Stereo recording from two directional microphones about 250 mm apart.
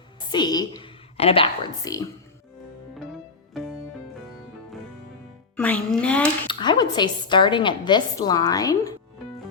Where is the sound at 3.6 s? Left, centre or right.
Centre.